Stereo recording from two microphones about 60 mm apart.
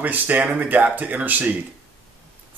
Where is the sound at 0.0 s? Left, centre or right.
Right.